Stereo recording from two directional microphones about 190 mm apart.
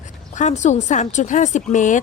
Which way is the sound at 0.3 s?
40° left (ahead or behind).